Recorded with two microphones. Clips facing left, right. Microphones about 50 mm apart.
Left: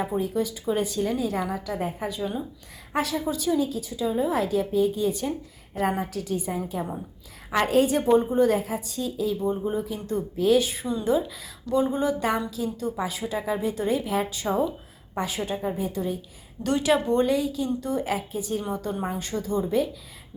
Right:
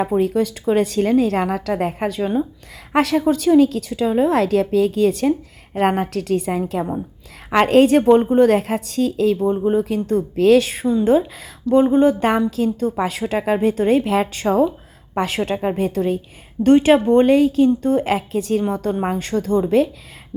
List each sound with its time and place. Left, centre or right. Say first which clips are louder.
0.0 s a woman's voice: right 8 dB; right
5.7 s a woman's voice: right 8 dB; right
11.7 s a woman's voice: right 10 dB; right
16.6 s speech: right 10 dB; right